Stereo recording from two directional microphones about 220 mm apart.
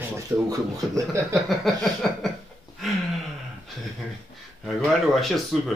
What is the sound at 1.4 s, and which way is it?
Speech, centre (ahead or behind).